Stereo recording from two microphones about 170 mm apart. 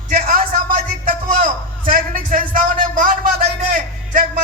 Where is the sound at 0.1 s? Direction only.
55° right (ahead or behind).